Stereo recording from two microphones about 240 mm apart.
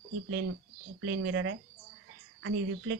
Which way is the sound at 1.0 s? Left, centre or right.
Right.